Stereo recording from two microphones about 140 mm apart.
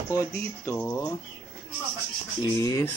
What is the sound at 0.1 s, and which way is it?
Speech, 20° left (ahead or behind).